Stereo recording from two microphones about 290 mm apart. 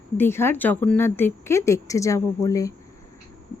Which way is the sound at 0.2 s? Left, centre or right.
Centre.